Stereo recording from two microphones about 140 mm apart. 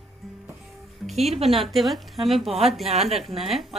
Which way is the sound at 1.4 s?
Centre (ahead or behind).